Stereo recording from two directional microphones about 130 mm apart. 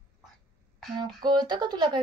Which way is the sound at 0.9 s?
35° right (ahead or behind).